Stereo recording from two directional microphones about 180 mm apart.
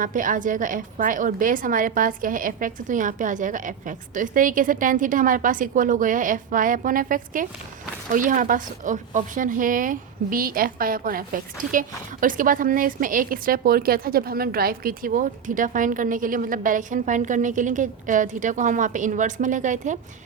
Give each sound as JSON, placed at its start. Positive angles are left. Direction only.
{"t": 0.0, "sound": "a woman's voice", "side_deg": -45}